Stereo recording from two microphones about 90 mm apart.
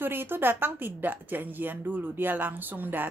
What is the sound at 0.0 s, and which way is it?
A woman's voice, 25° right (ahead or behind).